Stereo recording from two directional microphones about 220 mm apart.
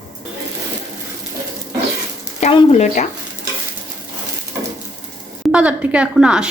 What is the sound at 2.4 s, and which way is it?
Speech, 25° left (ahead or behind).